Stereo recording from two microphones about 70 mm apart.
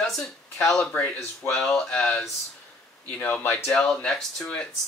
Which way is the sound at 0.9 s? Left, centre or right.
Left.